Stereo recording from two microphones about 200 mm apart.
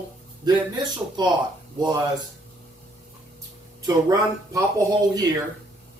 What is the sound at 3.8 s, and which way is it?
Speech, 20° right (ahead or behind).